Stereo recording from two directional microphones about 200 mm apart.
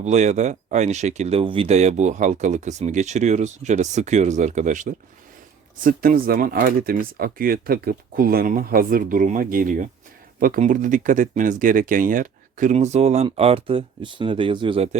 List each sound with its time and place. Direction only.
0.0 s speech: 35° right (ahead or behind)